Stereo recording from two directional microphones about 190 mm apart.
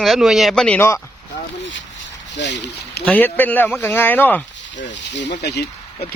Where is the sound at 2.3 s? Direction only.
65° left (ahead or behind).